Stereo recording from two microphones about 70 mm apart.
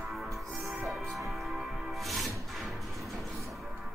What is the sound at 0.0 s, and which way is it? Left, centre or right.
Music, centre.